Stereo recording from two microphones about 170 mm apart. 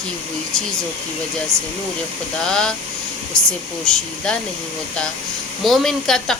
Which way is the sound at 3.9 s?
5° left (ahead or behind).